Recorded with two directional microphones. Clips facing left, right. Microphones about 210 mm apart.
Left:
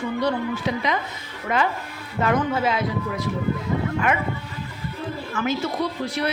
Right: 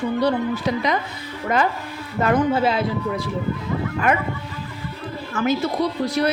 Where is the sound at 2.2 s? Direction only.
30° right (ahead or behind).